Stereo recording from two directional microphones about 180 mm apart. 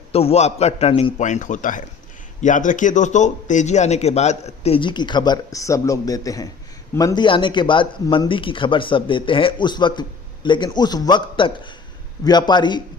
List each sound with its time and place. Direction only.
0.1 s a man's voice: 35° left (ahead or behind)